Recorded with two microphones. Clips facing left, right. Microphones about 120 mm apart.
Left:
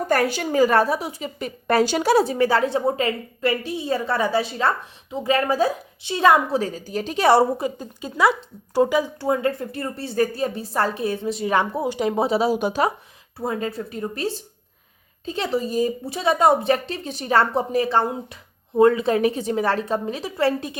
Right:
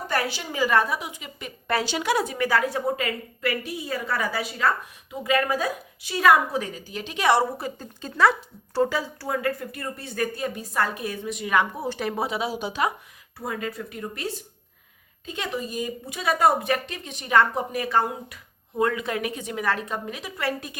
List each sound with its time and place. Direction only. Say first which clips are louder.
0.1 s a woman's voice: left 7 dB; 50° left (ahead or behind)
7.6 s speech: left 6 dB; 15° left (ahead or behind); by 11.8 s 35° left (ahead or behind)
11.8 s a woman's voice: left 6 dB; 20° left (ahead or behind)
12.3 s speech: left 8 dB; 35° left (ahead or behind)
12.5 s speech: left 7 dB; 50° left (ahead or behind)
13.4 s speech: left 5 dB; 30° left (ahead or behind)